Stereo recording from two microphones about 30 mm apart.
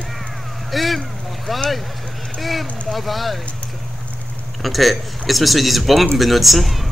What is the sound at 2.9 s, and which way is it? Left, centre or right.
Speech, centre.